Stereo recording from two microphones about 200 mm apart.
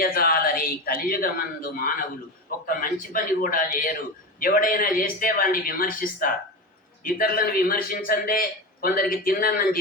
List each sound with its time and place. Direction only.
0.0 s a man's voice: 50° left (ahead or behind)